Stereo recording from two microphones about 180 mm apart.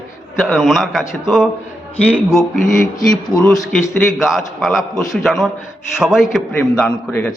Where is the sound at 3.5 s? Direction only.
20° left (ahead or behind).